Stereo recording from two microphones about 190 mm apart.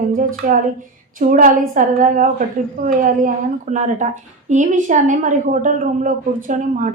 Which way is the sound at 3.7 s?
40° right (ahead or behind).